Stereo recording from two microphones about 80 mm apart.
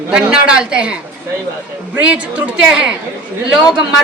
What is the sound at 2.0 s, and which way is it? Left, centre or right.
Speech, centre.